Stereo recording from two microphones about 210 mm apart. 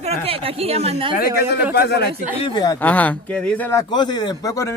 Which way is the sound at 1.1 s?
45° left (ahead or behind).